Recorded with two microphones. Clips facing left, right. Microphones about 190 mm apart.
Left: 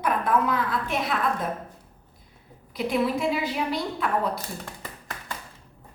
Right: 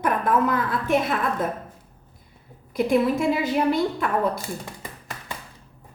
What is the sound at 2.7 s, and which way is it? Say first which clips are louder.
Speech: right 4 dB; 50° right (ahead or behind).